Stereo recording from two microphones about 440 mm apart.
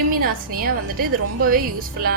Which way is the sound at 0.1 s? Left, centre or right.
Centre.